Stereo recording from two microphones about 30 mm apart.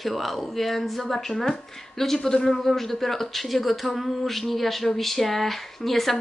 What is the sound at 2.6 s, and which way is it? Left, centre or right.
A woman's voice, centre.